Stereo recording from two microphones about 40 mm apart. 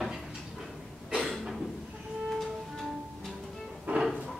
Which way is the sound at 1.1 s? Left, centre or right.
Centre.